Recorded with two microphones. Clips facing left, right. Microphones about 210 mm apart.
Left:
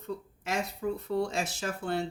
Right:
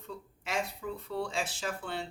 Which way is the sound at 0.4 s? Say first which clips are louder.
Left 4 dB; 40° left (ahead or behind).